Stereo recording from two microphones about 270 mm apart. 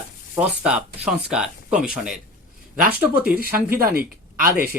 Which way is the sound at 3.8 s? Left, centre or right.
Right.